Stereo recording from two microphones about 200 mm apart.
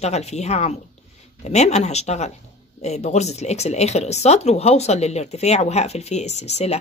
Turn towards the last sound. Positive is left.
turn(degrees=35)  # may be behind; listen again after turning